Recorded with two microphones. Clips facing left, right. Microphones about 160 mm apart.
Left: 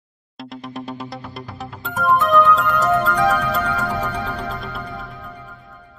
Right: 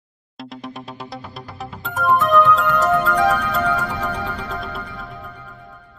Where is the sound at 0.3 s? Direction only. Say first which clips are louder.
Left 1 dB; centre (ahead or behind).